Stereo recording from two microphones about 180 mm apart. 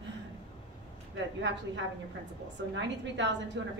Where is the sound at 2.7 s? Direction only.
80° right.